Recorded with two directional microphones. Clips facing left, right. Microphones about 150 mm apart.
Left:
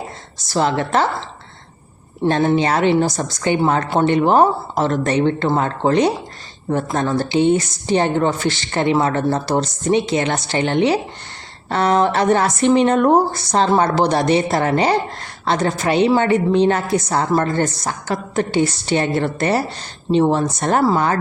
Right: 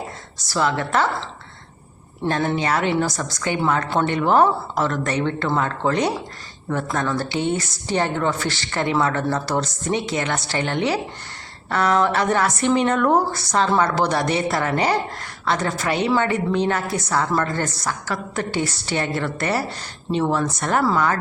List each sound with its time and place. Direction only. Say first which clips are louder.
0.3 s a woman's voice: left 4 dB; 25° left (ahead or behind)
2.2 s a woman's voice: left 6 dB; 25° left (ahead or behind)